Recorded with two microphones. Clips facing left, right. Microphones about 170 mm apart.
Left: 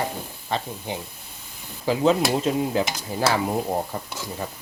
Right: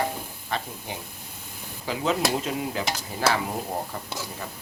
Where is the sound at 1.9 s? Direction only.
30° left (ahead or behind).